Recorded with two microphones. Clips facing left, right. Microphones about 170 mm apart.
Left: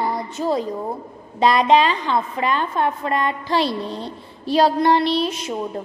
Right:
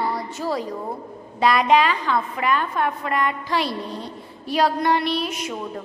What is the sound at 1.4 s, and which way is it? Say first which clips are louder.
A woman's voice: left 2 dB; 25° left (ahead or behind).